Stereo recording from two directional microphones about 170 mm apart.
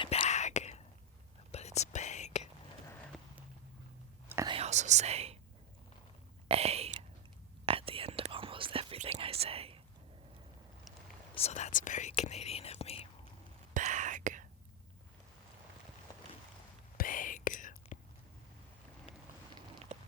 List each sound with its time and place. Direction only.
0.0 s whispering: 35° left (ahead or behind)
3.1 s clip-clop: centre (ahead or behind)
4.4 s whispering: 35° right (ahead or behind)
6.5 s whispering: 35° right (ahead or behind)
11.3 s whispering: 40° left (ahead or behind)
13.7 s whispering: 45° right (ahead or behind)
17.0 s whispering: 50° left (ahead or behind)
19.9 s a sound: 45° right (ahead or behind)